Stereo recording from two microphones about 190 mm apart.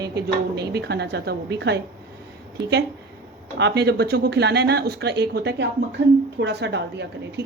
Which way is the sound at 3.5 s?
65° right (ahead or behind).